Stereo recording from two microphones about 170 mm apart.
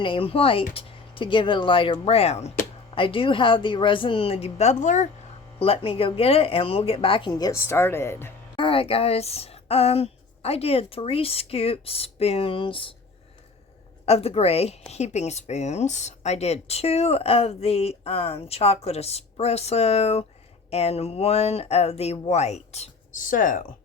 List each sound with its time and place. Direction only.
0.0 s speech: 30° left (ahead or behind)
5.5 s speech: 35° left (ahead or behind); by 8.3 s 15° left (ahead or behind)
8.5 s speech: 30° left (ahead or behind)
14.0 s speech: 35° left (ahead or behind); by 23.6 s 50° left (ahead or behind)